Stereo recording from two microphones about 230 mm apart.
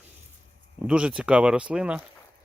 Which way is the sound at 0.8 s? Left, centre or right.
Centre.